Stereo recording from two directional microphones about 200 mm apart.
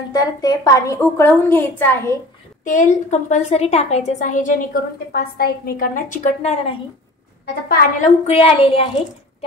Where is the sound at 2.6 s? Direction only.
40° left (ahead or behind).